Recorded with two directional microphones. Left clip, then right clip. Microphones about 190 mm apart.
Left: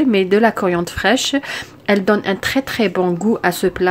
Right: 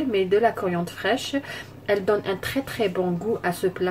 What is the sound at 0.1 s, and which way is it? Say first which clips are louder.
A woman's voice: left 2 dB; 55° left (ahead or behind).